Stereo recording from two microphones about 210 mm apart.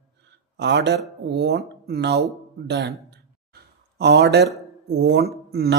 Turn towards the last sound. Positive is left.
turn(degrees=-50)  # may be behind; listen again after turning